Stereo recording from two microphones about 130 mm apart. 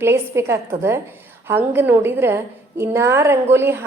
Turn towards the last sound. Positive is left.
turn(degrees=-20)  # may be behind; listen again after turning